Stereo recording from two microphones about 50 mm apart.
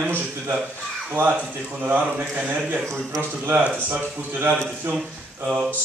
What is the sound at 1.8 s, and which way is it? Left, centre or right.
A man's voice, right.